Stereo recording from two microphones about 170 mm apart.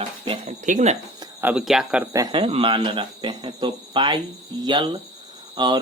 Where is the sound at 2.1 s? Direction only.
25° right (ahead or behind).